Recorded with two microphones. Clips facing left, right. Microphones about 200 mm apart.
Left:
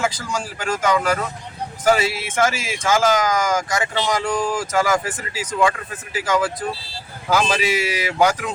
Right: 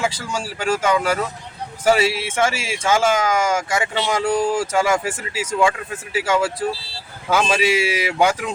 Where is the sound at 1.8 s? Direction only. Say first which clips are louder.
Right 1 dB; 30° right (ahead or behind).